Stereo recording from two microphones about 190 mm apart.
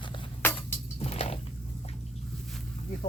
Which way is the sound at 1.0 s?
30° left (ahead or behind).